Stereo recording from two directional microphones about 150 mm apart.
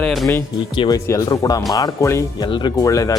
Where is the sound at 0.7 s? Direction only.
30° left (ahead or behind).